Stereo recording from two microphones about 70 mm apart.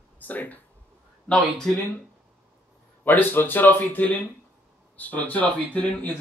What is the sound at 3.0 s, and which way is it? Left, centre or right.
Speech, left.